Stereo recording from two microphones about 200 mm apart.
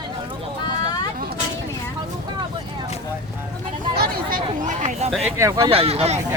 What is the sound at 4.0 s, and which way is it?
Speech, 40° right (ahead or behind).